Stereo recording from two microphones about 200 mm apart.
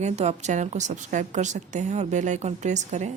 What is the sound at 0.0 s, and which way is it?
A woman's voice, 35° right (ahead or behind).